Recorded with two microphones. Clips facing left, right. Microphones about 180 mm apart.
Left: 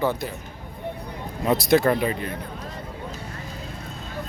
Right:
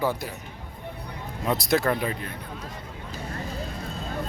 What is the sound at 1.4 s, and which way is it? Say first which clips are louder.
Speech: left 5 dB; centre (ahead or behind).